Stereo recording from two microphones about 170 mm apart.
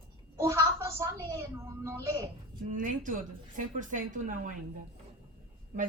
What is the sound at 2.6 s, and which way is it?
A woman's voice, 50° right (ahead or behind).